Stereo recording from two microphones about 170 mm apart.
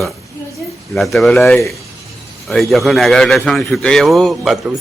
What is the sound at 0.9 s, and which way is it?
A man's voice, centre (ahead or behind).